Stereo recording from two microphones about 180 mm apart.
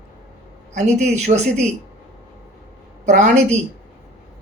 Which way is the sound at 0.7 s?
40° right (ahead or behind).